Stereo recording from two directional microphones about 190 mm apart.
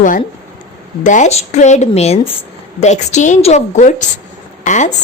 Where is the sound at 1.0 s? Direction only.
40° left (ahead or behind).